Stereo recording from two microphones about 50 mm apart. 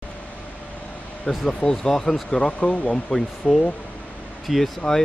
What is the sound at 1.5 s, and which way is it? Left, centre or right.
Speech, centre.